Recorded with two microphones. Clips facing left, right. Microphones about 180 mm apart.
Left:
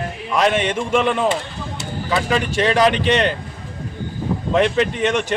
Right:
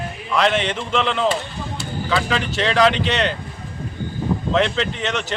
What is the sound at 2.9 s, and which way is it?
Speech, 55° left (ahead or behind).